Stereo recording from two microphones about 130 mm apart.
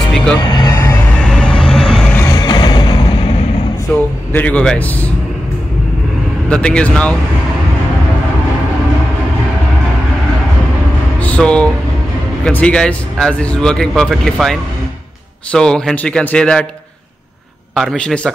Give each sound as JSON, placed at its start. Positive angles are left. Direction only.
{"t": 0.7, "sound": "music", "side_deg": 20}
{"t": 1.2, "sound": "vehicle", "side_deg": 5}
{"t": 2.2, "sound": "music", "side_deg": 35}
{"t": 3.9, "sound": "a man's voice", "side_deg": 15}
{"t": 6.5, "sound": "a man's voice", "side_deg": 5}
{"t": 11.1, "sound": "a sound", "side_deg": 10}
{"t": 12.4, "sound": "a man's voice", "side_deg": 5}
{"t": 17.7, "sound": "a man's voice", "side_deg": 5}